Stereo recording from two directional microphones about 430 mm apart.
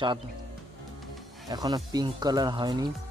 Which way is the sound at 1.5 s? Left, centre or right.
Centre.